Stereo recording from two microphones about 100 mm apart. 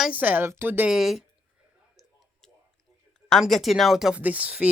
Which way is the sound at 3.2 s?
5° left (ahead or behind).